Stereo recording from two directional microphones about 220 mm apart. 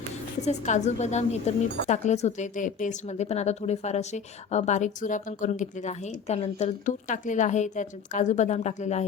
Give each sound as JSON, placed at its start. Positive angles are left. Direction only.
{"t": 0.4, "sound": "a woman's voice", "side_deg": 30}